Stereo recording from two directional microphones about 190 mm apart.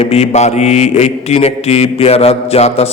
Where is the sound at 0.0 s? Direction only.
35° left (ahead or behind).